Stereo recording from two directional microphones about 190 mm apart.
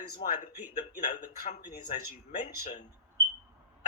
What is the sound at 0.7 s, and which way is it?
Speech, 40° left (ahead or behind).